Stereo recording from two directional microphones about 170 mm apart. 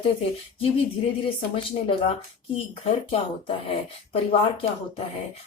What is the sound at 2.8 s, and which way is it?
Speech, 35° left (ahead or behind).